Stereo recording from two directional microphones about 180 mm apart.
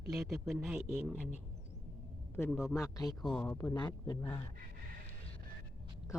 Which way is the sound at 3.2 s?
5° left (ahead or behind).